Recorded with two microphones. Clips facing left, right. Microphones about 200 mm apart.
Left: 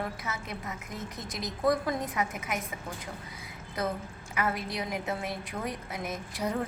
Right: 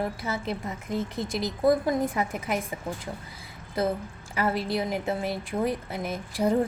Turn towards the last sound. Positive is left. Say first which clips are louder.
# right 7 dB
turn(degrees=-30)  # may be behind; listen again after turning